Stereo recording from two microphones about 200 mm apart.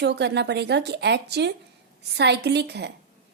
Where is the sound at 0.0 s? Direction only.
55° right (ahead or behind).